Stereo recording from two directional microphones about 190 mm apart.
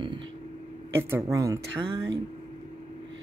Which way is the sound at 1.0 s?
15° right (ahead or behind).